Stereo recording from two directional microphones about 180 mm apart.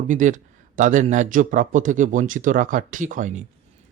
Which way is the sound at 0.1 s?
45° right (ahead or behind).